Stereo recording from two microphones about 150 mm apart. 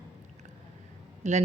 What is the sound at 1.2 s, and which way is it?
Speech, 50° right (ahead or behind).